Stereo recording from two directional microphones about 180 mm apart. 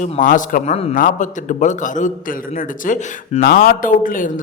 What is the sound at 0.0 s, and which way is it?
A man's voice, 45° left (ahead or behind).